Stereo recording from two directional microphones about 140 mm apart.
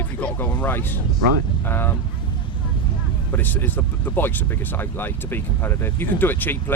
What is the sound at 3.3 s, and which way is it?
Speech, 15° left (ahead or behind).